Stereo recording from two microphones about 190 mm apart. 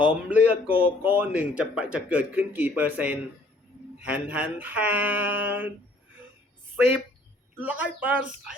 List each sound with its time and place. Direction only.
0.0 s speech: 5° right (ahead or behind)
7.6 s speech: 10° right (ahead or behind)